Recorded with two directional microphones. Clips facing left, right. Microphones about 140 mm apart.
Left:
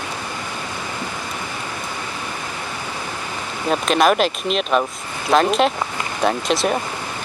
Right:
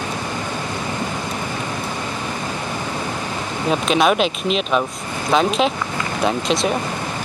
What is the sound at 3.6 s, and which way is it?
Speech, centre (ahead or behind).